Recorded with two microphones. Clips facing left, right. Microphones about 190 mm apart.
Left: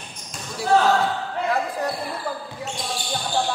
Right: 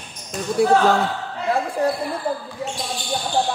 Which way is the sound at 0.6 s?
55° right (ahead or behind).